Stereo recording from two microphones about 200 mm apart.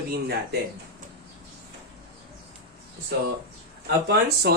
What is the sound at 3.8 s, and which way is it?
Speech, 55° right (ahead or behind).